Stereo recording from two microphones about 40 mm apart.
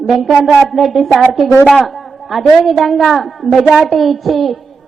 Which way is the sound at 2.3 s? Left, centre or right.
Centre.